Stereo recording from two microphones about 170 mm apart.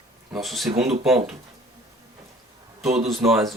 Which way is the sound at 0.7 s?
35° right (ahead or behind).